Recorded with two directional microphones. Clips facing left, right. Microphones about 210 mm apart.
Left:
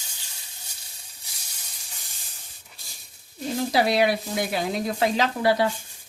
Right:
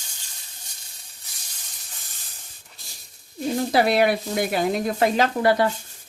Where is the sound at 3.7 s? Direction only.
50° right (ahead or behind).